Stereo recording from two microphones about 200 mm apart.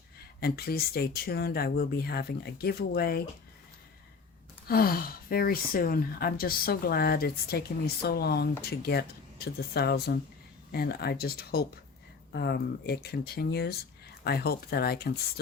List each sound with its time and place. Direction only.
0.3 s speech: 50° left (ahead or behind)
4.7 s speech: 50° left (ahead or behind)